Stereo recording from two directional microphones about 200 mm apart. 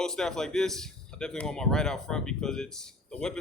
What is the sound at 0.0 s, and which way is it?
Speech, centre (ahead or behind).